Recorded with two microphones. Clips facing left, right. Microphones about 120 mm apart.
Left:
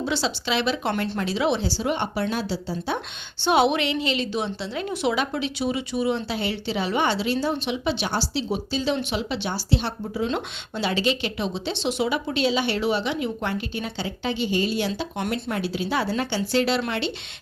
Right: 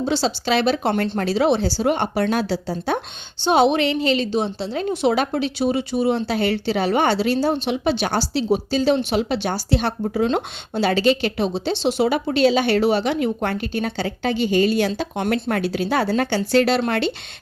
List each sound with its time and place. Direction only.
0.0 s a woman's voice: 35° right (ahead or behind); by 3.0 s 50° right (ahead or behind)
3.5 s a woman's voice: 35° right (ahead or behind)